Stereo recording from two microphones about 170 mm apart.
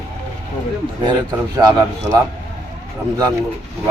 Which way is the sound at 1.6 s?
20° right (ahead or behind).